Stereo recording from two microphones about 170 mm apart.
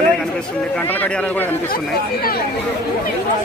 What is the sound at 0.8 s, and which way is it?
Speech, 10° left (ahead or behind).